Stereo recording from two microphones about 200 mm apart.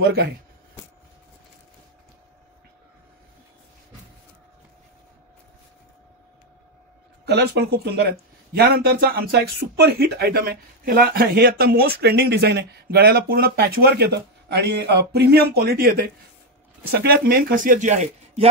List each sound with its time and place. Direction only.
0.0 s speech: 50° right (ahead or behind)
7.2 s speech: 55° right (ahead or behind); by 18.5 s 35° right (ahead or behind)